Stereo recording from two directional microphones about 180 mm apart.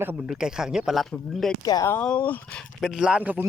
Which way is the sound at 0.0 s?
10° right (ahead or behind).